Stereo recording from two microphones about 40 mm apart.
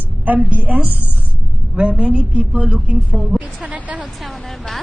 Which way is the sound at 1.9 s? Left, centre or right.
Right.